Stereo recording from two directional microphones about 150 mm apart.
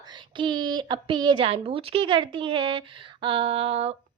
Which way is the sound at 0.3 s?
30° right (ahead or behind).